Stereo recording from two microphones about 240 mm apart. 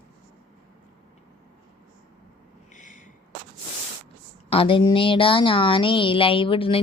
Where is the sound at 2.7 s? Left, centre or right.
Left.